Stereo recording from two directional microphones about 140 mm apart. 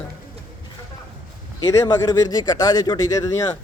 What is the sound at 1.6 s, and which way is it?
Speech, 25° left (ahead or behind).